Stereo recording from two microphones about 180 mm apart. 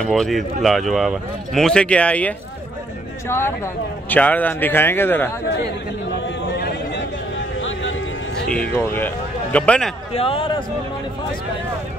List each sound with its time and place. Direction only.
0.0 s speech: centre (ahead or behind)
6.6 s a sound: 75° left (ahead or behind)
7.5 s music: 90° left
8.6 s speech: 10° left (ahead or behind)
10.1 s speech: 30° left (ahead or behind)